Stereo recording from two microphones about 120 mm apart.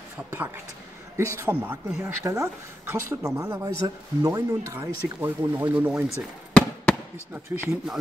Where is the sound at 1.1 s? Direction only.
25° right (ahead or behind).